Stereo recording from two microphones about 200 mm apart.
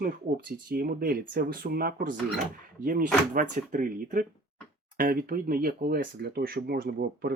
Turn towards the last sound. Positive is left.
turn(degrees=-50)  # may be behind; listen again after turning